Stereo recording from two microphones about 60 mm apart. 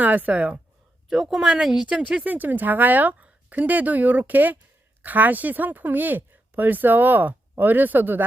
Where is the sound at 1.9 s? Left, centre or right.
Right.